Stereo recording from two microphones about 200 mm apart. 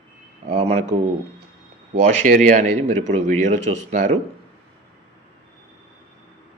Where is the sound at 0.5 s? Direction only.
30° right (ahead or behind).